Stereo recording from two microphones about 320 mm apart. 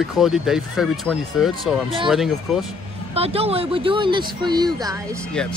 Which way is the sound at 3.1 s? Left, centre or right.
Centre.